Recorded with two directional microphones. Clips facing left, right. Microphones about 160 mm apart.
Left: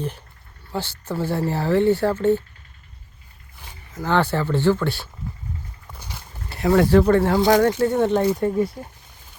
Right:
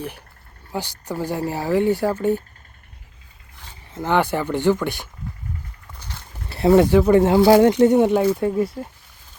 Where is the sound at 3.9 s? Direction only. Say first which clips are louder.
Right 1 dB; 20° right (ahead or behind).